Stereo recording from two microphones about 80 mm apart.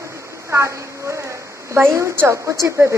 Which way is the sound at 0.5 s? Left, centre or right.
Right.